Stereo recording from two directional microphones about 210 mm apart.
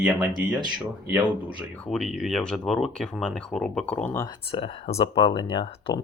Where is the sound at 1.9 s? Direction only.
Centre (ahead or behind).